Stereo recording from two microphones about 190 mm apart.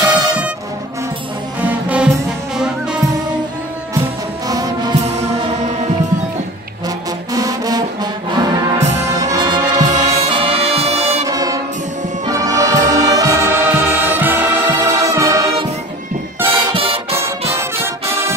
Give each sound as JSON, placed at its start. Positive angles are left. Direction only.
{"t": 0.0, "sound": "music", "side_deg": -5}
{"t": 1.6, "sound": "music", "side_deg": -10}
{"t": 4.5, "sound": "music", "side_deg": -20}
{"t": 5.0, "sound": "music", "side_deg": -35}
{"t": 7.3, "sound": "brass instrument", "side_deg": -20}
{"t": 8.8, "sound": "music", "side_deg": -35}
{"t": 9.2, "sound": "music", "side_deg": -20}
{"t": 11.2, "sound": "music", "side_deg": -20}
{"t": 16.7, "sound": "music", "side_deg": -30}
{"t": 17.2, "sound": "brass instrument", "side_deg": -15}